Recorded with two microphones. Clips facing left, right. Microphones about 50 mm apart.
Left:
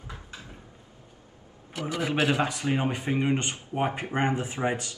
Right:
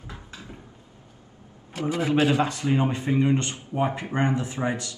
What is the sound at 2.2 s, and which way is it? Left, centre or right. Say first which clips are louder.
A man's voice: right 3 dB; centre.